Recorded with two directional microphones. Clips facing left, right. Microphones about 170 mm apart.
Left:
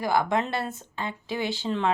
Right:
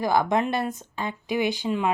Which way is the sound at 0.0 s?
20° right (ahead or behind).